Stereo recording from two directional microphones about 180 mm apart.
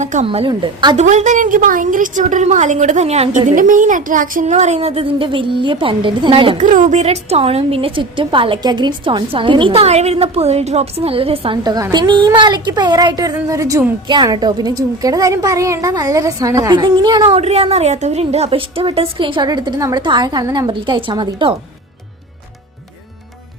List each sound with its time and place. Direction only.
0.0 s a woman's voice: 40° right (ahead or behind)
0.3 s a woman's voice: 30° right (ahead or behind)
0.9 s a woman's voice: 40° right (ahead or behind)
6.6 s a woman's voice: 45° right (ahead or behind); by 21.5 s 25° right (ahead or behind)